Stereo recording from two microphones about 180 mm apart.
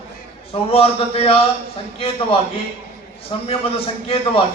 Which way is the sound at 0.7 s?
35° left (ahead or behind).